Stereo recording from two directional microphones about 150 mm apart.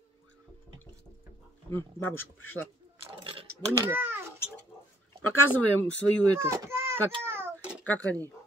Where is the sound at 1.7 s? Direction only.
15° left (ahead or behind).